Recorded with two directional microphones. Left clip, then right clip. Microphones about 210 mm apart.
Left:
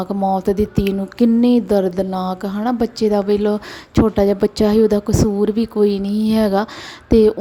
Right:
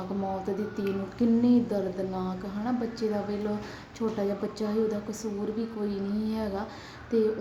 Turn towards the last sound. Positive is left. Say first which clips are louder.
# left 14 dB
turn(degrees=45)  # may be behind; listen again after turning